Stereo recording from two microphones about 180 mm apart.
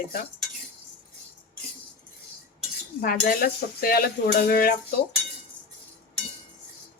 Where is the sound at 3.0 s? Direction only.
55° left (ahead or behind).